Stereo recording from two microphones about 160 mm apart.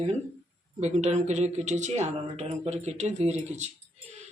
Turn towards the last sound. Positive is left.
turn(degrees=-45)  # may be behind; listen again after turning